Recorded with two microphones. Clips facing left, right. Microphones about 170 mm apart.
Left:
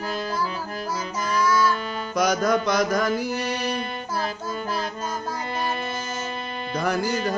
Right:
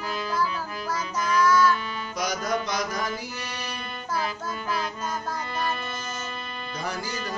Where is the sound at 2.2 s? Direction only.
60° left (ahead or behind).